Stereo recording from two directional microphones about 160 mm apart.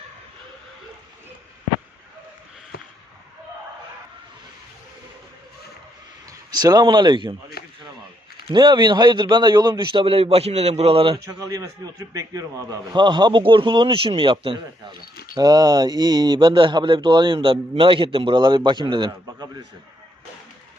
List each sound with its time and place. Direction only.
6.5 s speech: 25° right (ahead or behind)
7.6 s a sound: 75° left (ahead or behind)
8.5 s a man's voice: 30° right (ahead or behind)
11.3 s speech: 20° right (ahead or behind)